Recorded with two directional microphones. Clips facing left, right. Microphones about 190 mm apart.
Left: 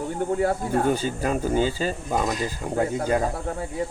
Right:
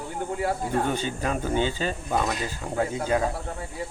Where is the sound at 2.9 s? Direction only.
50° left (ahead or behind).